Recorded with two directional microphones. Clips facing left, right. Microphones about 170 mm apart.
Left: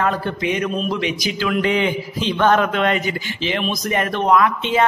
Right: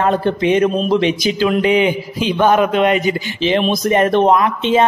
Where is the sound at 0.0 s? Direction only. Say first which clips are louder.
Right 6 dB; 25° right (ahead or behind).